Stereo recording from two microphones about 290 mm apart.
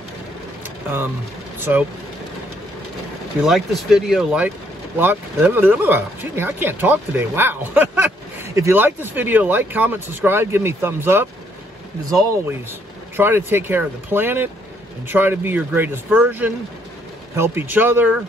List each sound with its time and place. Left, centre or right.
1.6 s speech: centre
3.4 s speech: centre
13.1 s speech: centre